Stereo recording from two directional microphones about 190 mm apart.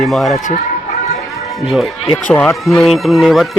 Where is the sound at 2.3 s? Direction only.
5° left (ahead or behind).